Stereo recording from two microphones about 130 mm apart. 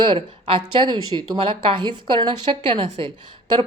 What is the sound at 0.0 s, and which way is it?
Speech, 40° right (ahead or behind).